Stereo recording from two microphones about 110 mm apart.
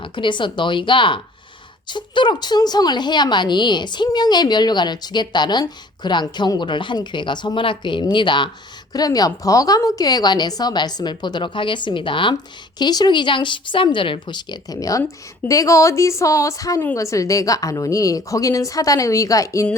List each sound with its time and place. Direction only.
0.0 s speech: 45° left (ahead or behind)
8.9 s a woman's voice: 35° left (ahead or behind)
12.8 s a woman's voice: 40° left (ahead or behind)